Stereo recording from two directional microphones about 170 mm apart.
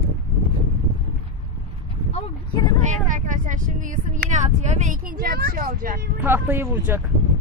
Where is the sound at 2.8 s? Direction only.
45° right (ahead or behind).